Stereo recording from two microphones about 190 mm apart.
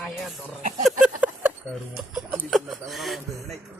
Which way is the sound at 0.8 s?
5° right (ahead or behind).